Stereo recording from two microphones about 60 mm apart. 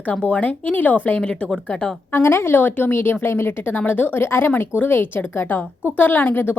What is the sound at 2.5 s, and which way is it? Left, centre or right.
A woman's voice, left.